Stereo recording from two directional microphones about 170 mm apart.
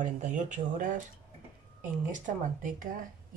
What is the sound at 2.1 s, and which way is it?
Speech, 50° right (ahead or behind).